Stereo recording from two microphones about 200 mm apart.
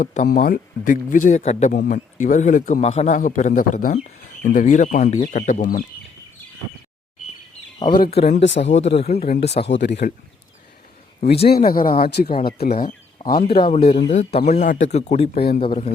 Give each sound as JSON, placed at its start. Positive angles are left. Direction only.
{"t": 0.0, "sound": "speech", "side_deg": 40}
{"t": 8.1, "sound": "speech", "side_deg": 30}
{"t": 8.4, "sound": "speech", "side_deg": 60}
{"t": 9.0, "sound": "speech", "side_deg": 30}
{"t": 9.6, "sound": "speech", "side_deg": 60}
{"t": 11.4, "sound": "speech", "side_deg": 45}
{"t": 13.5, "sound": "speech", "side_deg": 25}
{"t": 15.4, "sound": "speech", "side_deg": 50}
{"t": 15.6, "sound": "a man's voice", "side_deg": 25}